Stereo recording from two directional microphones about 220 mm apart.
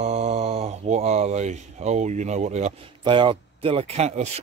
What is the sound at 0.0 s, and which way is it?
Speech, 30° right (ahead or behind).